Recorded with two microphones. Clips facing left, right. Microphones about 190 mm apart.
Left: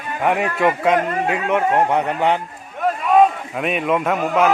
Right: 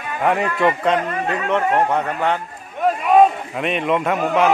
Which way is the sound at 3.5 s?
5° left (ahead or behind).